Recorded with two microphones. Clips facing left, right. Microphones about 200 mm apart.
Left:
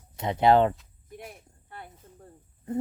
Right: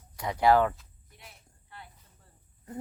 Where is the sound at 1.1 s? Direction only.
55° left (ahead or behind).